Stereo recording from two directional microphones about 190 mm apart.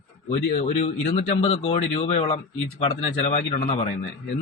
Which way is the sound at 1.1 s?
35° left (ahead or behind).